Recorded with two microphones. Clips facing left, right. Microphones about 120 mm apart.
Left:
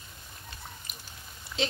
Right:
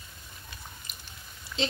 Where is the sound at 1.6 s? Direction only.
Centre (ahead or behind).